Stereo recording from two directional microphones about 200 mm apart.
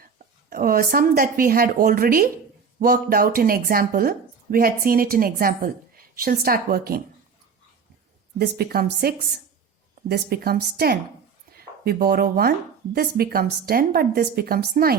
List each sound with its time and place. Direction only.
0.5 s speech: 45° right (ahead or behind)
8.4 s speech: 50° right (ahead or behind)